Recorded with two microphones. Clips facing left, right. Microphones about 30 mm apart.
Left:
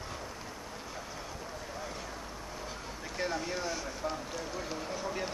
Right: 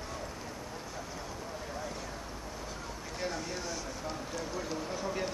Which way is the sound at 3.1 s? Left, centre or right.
Centre.